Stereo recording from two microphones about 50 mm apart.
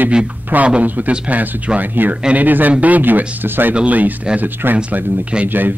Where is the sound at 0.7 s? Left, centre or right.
Right.